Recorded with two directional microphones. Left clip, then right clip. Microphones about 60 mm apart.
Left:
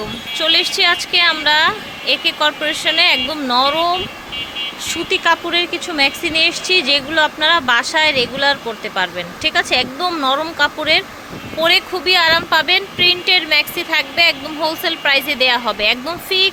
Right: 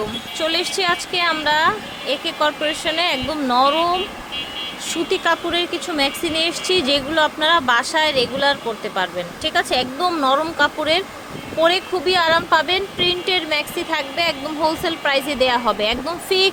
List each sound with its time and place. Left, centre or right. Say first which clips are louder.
0.3 s a woman's voice: left 6 dB; right
2.5 s speech: left 2 dB; centre
2.8 s a woman's voice: left 9 dB; centre
4.9 s a woman's voice: left 3 dB; centre
6.5 s speech: left 4 dB; right
8.4 s speech: left 2 dB; centre
10.1 s a woman's voice: left 1 dB; right